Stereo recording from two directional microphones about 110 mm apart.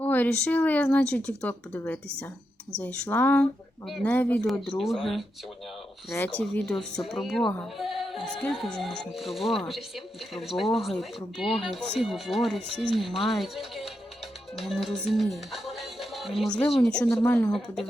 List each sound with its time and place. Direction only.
0.0 s a woman's voice: 15° left (ahead or behind)
4.8 s speech: centre (ahead or behind)
6.1 s a woman's voice: 20° left (ahead or behind)
6.5 s speech: 10° left (ahead or behind)
7.6 s music: centre (ahead or behind)
8.5 s a woman's voice: centre (ahead or behind)
17.2 s speech: 20° left (ahead or behind)